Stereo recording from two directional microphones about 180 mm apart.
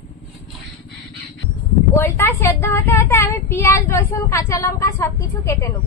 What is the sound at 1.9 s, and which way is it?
Speech, 15° left (ahead or behind).